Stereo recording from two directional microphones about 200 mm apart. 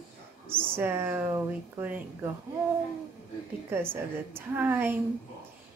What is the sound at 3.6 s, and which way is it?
A woman's voice, 10° right (ahead or behind).